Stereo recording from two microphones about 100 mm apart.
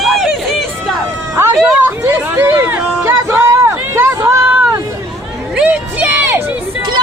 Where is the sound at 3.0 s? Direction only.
30° right (ahead or behind).